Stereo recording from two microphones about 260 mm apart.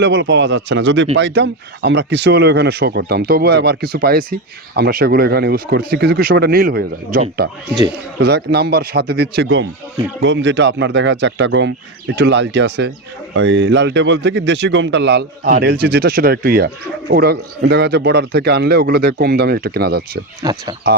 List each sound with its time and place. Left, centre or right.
0.0 s speech: right
20.4 s speech: centre